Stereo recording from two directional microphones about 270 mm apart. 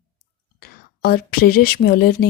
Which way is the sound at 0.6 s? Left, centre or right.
Left.